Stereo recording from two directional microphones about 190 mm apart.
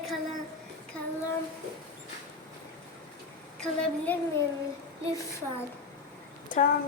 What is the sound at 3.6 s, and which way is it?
Speech, 5° left (ahead or behind).